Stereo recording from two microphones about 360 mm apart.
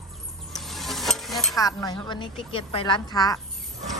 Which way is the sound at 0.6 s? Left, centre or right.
Centre.